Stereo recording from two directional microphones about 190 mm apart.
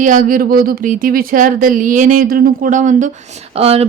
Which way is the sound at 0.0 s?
45° right (ahead or behind).